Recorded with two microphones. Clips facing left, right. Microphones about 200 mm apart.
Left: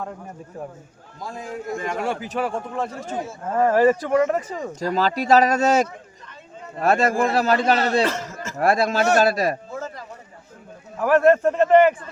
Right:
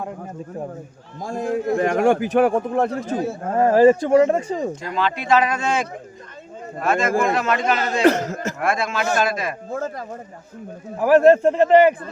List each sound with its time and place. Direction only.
1.2 s a man's voice: 50° right (ahead or behind)
3.6 s speech: 25° right (ahead or behind)
4.8 s speech: 40° left (ahead or behind)
8.0 s a man's voice: 65° right (ahead or behind)
8.5 s speech: 35° left (ahead or behind)
9.6 s speech: 50° right (ahead or behind)
11.2 s speech: 25° right (ahead or behind)